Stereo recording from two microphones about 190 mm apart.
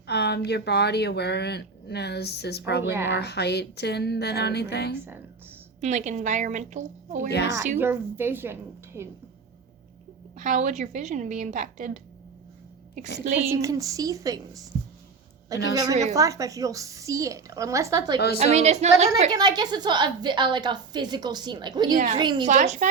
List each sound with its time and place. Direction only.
0.1 s speech: 60° left (ahead or behind)
5.8 s a woman's voice: 40° right (ahead or behind)
7.3 s speech: 65° left (ahead or behind)
7.8 s a woman's voice: 10° right (ahead or behind)
10.3 s a woman's voice: 40° right (ahead or behind)
13.5 s a woman's voice: 15° right (ahead or behind)
15.7 s a woman's voice: 20° right (ahead or behind)
18.3 s a woman's voice: 35° right (ahead or behind)
19.3 s a woman's voice: 20° right (ahead or behind)
21.9 s a woman's voice: 40° right (ahead or behind)
22.2 s a woman's voice: 25° right (ahead or behind)
22.4 s a woman's voice: 40° right (ahead or behind)